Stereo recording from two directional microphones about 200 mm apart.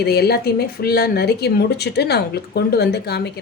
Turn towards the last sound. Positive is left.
turn(degrees=55)  # may be behind; listen again after turning